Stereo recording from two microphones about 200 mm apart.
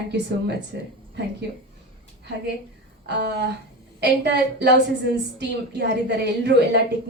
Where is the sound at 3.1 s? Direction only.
55° right (ahead or behind).